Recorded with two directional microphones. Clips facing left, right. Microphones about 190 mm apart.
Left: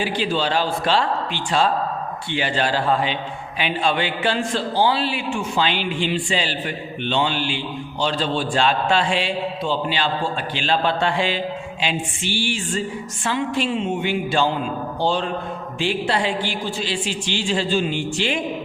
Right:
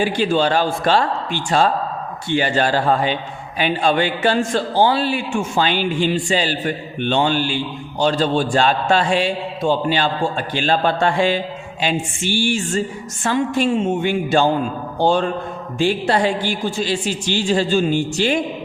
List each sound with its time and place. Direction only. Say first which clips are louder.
0.0 s a man's voice: right 5 dB; 50° right (ahead or behind)